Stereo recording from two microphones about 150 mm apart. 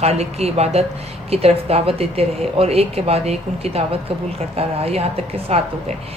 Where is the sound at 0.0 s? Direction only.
45° right (ahead or behind).